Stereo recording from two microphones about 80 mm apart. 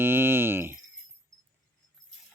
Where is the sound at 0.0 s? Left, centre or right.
Right.